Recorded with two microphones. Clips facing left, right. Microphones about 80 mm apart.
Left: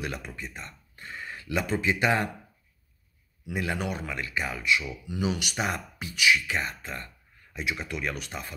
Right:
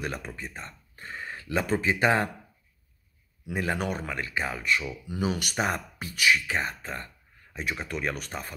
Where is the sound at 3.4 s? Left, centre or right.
Right.